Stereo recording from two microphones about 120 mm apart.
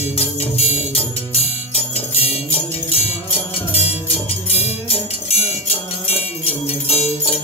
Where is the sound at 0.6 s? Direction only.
60° left (ahead or behind).